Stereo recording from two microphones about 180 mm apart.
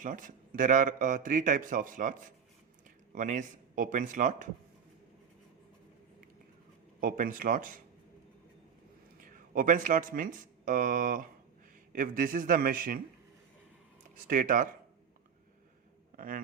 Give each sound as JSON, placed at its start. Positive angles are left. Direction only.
{"t": 0.0, "sound": "speech", "side_deg": -45}
{"t": 7.0, "sound": "speech", "side_deg": -50}
{"t": 9.2, "sound": "speech", "side_deg": -50}
{"t": 14.3, "sound": "speech", "side_deg": -50}
{"t": 16.1, "sound": "a man's voice", "side_deg": -50}